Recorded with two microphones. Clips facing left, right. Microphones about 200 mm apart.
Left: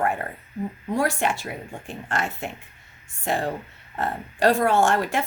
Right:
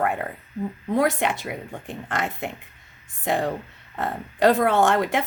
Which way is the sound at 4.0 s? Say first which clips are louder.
Right 2 dB; 20° right (ahead or behind).